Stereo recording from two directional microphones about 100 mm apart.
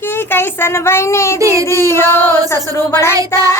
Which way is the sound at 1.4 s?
35° right (ahead or behind).